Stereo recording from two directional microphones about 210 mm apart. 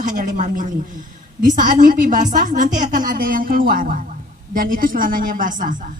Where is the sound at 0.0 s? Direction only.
40° right (ahead or behind).